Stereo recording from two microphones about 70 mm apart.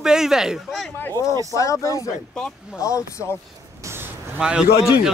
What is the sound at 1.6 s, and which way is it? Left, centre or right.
Speech, left.